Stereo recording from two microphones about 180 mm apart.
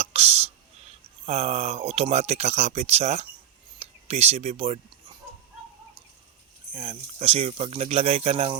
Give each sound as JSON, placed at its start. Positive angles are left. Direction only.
{"t": 0.0, "sound": "speech", "side_deg": -35}
{"t": 3.8, "sound": "whispering", "side_deg": -35}
{"t": 6.7, "sound": "speech", "side_deg": -30}